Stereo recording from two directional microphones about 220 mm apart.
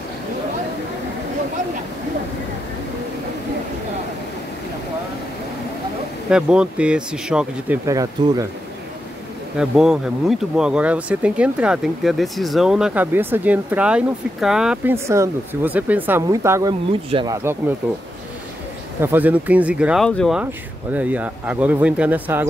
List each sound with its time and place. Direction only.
6.3 s speech: 5° right (ahead or behind)
9.6 s speech: 5° right (ahead or behind); by 17.4 s 20° right (ahead or behind)
17.4 s speech: 10° right (ahead or behind)
18.9 s speech: 10° right (ahead or behind)